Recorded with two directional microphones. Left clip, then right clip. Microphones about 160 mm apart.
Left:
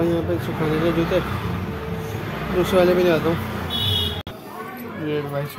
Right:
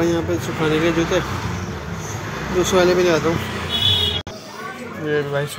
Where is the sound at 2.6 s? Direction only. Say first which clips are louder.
Right 1 dB; centre (ahead or behind).